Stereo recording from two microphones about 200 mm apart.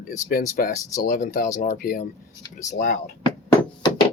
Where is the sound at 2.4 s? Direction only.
15° left (ahead or behind).